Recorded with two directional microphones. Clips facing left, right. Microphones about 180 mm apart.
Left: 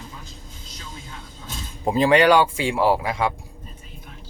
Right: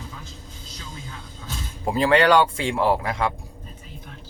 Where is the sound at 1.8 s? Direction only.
20° left (ahead or behind).